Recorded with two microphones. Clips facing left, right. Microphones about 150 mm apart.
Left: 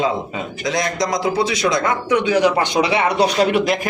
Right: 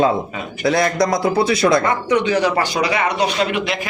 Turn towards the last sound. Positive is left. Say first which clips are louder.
# left 4 dB
turn(degrees=35)  # may be behind; listen again after turning